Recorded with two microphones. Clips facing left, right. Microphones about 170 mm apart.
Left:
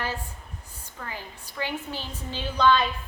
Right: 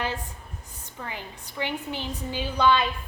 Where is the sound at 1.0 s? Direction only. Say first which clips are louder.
Right 1 dB; 20° right (ahead or behind).